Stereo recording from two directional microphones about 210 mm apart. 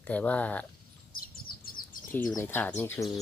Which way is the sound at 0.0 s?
5° left (ahead or behind).